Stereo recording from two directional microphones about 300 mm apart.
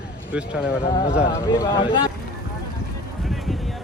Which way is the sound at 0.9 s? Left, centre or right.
Centre.